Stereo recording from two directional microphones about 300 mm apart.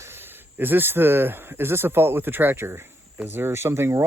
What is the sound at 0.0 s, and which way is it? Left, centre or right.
Speech, centre.